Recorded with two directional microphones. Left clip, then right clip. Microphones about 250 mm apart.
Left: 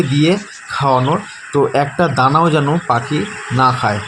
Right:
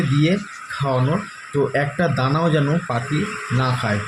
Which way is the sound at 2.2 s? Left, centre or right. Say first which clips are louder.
Left 10 dB; centre.